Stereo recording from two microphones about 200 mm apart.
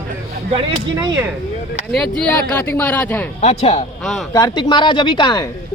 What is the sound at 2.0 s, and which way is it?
Speech, 5° left (ahead or behind).